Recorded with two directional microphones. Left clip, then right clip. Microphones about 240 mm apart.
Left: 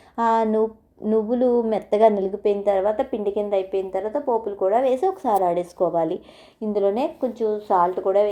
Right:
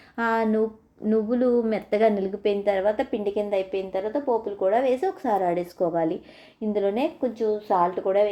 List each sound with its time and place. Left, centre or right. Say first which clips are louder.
0.2 s a woman's voice: left 4 dB; centre